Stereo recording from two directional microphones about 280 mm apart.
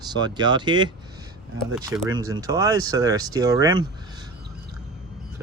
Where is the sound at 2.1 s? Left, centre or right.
Centre.